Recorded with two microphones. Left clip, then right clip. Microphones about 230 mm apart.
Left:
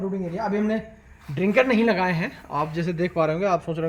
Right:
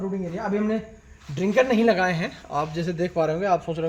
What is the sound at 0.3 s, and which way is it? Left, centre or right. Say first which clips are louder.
Speech: left 1 dB; centre.